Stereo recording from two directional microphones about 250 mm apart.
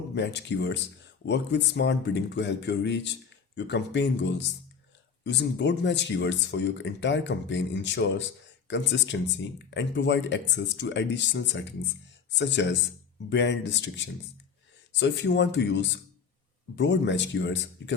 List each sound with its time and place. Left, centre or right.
0.1 s speech: left